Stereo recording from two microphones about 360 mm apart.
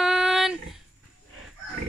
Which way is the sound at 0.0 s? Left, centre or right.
Centre.